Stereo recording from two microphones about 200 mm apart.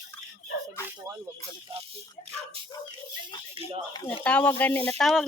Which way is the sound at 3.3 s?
25° left (ahead or behind).